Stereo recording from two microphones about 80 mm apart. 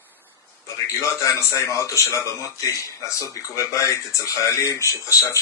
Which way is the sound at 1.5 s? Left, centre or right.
Left.